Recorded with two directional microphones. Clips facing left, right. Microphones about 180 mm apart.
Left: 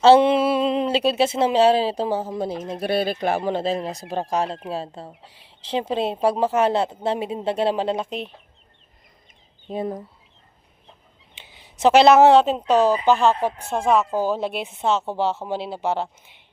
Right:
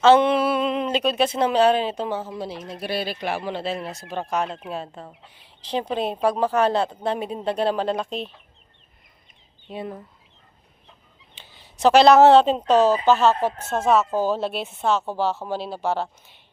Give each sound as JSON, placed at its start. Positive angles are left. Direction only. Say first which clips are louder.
{"t": 0.0, "sound": "a woman's voice", "louder": "left 2 dB", "side_deg": 30}
{"t": 9.6, "sound": "speech", "louder": "left 5 dB", "side_deg": 40}
{"t": 11.3, "sound": "a woman's voice", "louder": "left 1 dB", "side_deg": 20}